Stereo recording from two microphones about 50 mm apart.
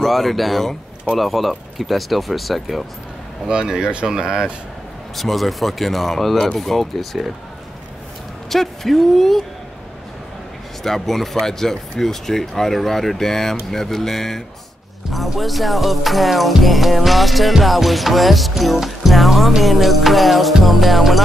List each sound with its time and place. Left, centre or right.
0.0 s music: centre
3.4 s speech: centre
5.1 s music: centre
8.5 s music: centre
10.8 s speech: centre
15.0 s music: centre